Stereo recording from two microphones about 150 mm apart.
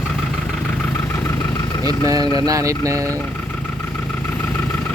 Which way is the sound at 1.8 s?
25° right (ahead or behind).